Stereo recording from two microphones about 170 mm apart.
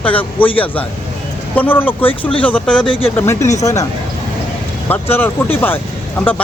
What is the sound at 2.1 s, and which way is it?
Speech, 30° left (ahead or behind).